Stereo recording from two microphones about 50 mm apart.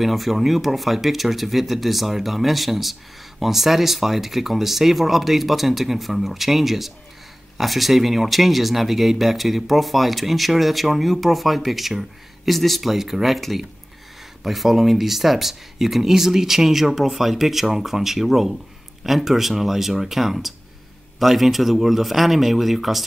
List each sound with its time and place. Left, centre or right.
0.0 s speech: centre